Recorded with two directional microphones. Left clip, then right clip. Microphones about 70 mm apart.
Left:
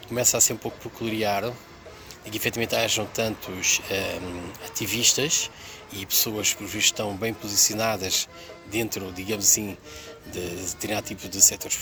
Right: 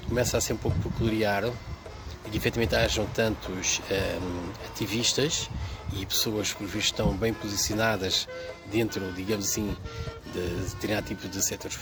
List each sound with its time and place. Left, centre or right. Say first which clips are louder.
0.1 s speech: left 3 dB; right